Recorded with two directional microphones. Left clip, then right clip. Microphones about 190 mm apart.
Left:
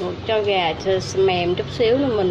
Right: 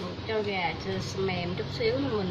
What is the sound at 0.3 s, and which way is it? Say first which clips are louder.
Speech: left 10 dB; 40° left (ahead or behind).